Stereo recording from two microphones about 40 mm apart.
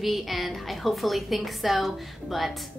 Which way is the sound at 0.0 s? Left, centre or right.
Centre.